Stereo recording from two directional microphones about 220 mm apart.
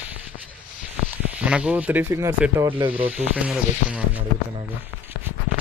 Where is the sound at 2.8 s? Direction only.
25° right (ahead or behind).